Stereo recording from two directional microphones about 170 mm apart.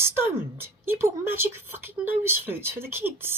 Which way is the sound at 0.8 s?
10° right (ahead or behind).